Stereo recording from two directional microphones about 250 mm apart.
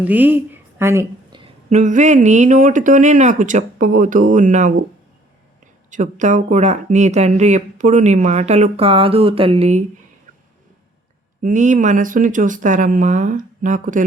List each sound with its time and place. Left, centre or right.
0.0 s speech: centre; by 4.9 s right
5.9 s speech: right
11.4 s speech: right